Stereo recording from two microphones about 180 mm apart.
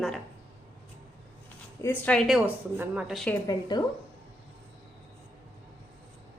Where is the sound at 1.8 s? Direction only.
10° left (ahead or behind); by 3.2 s 10° right (ahead or behind).